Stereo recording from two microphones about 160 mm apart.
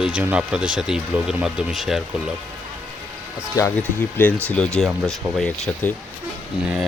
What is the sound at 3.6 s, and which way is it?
Speech, 20° left (ahead or behind).